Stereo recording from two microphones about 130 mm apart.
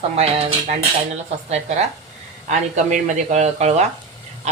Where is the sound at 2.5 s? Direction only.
70° right (ahead or behind).